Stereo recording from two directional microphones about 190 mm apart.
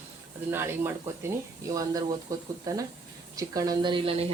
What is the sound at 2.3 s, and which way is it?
Speech, 15° right (ahead or behind).